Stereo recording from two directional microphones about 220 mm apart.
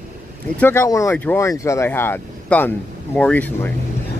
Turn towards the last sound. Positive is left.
turn(degrees=5)  # may be behind; listen again after turning